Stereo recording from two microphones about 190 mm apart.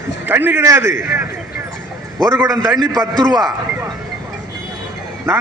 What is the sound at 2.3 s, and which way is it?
Speech, 15° right (ahead or behind).